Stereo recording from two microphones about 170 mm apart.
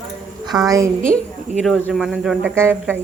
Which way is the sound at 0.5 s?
5° right (ahead or behind).